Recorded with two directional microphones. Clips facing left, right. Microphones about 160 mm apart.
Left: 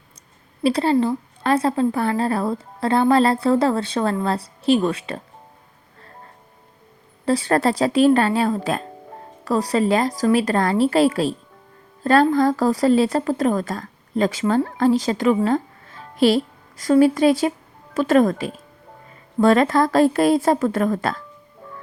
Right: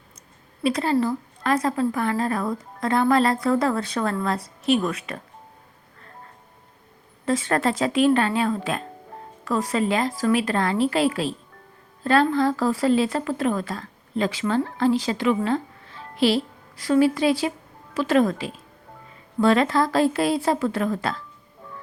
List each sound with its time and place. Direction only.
0.6 s a woman's voice: 30° left (ahead or behind)
7.3 s a woman's voice: 35° left (ahead or behind)